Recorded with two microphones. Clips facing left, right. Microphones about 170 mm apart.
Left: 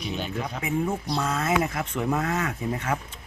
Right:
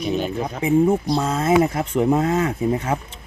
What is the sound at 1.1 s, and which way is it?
Speech, 30° right (ahead or behind).